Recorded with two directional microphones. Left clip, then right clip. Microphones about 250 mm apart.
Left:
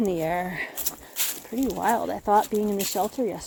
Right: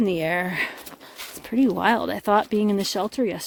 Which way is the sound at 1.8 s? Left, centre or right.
Right.